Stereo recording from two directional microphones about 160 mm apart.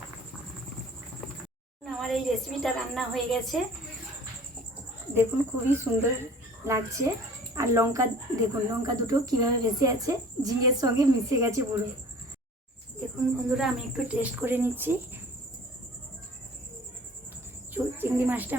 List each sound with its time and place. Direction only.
1.8 s a woman's voice: centre (ahead or behind)
5.1 s speech: 15° right (ahead or behind)
13.6 s speech: 5° right (ahead or behind)
17.7 s speech: 10° right (ahead or behind)